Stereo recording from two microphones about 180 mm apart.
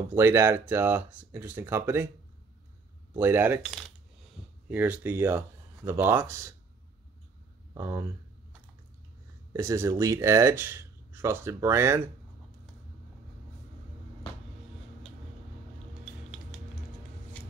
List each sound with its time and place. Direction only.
0.1 s speech: 15° right (ahead or behind)
3.2 s speech: 10° right (ahead or behind)
4.6 s speech: 10° right (ahead or behind)
7.7 s speech: 15° right (ahead or behind)
9.5 s speech: 15° right (ahead or behind)